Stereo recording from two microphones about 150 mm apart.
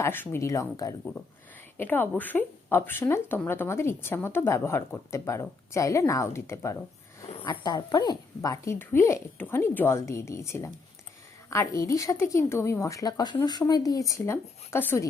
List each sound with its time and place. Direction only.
0.0 s a woman's voice: 15° left (ahead or behind)
7.4 s a woman's voice: 30° left (ahead or behind)